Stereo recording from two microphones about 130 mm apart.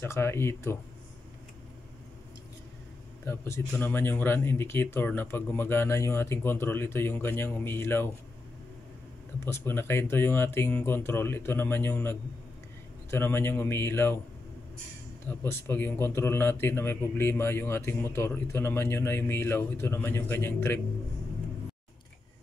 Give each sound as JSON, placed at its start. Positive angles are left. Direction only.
{"t": 0.0, "sound": "speech", "side_deg": 20}
{"t": 3.3, "sound": "a man's voice", "side_deg": 20}
{"t": 9.4, "sound": "a man's voice", "side_deg": 20}
{"t": 15.2, "sound": "a man's voice", "side_deg": 15}